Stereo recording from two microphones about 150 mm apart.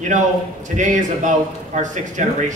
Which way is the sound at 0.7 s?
55° right (ahead or behind).